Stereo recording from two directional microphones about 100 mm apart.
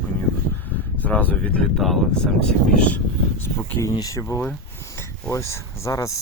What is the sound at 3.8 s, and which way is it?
Speech, 35° left (ahead or behind).